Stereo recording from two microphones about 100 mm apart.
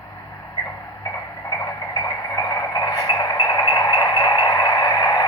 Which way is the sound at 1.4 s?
40° left (ahead or behind).